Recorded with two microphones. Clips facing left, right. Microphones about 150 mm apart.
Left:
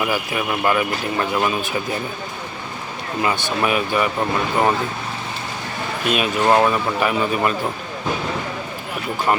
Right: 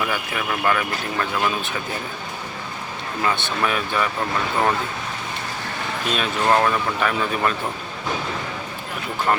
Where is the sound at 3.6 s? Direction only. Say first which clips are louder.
Left 4 dB; 10° left (ahead or behind).